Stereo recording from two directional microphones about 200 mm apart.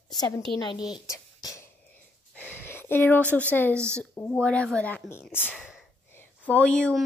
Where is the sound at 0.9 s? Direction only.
20° left (ahead or behind).